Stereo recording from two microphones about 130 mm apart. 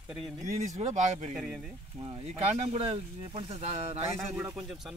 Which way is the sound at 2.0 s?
40° right (ahead or behind).